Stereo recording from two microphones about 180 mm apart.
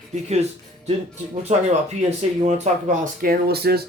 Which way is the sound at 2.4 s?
40° right (ahead or behind).